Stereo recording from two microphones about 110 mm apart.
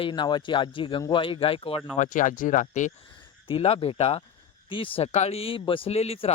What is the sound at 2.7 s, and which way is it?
Speech, 90° left.